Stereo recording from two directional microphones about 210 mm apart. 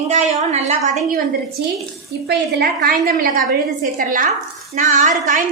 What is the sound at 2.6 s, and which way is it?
A woman's voice, 45° right (ahead or behind).